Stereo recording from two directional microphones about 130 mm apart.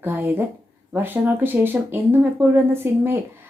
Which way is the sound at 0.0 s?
15° right (ahead or behind).